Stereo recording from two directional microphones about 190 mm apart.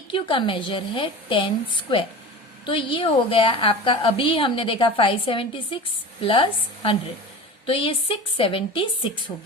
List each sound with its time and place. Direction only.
0.1 s a woman's voice: 25° left (ahead or behind)
2.6 s a woman's voice: 25° left (ahead or behind)